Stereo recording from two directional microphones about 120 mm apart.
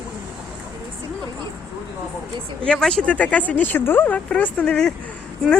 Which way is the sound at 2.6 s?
5° left (ahead or behind).